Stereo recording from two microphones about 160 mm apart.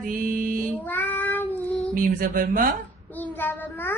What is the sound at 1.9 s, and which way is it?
Speech, 60° right (ahead or behind).